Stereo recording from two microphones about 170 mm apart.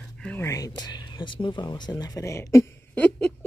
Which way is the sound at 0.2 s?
5° left (ahead or behind).